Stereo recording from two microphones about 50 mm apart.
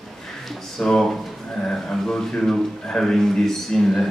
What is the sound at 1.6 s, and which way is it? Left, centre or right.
Speech, centre.